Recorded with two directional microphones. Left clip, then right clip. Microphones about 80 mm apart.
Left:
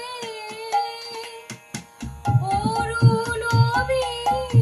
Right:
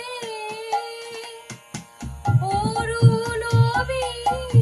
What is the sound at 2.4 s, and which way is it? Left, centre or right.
Music, right.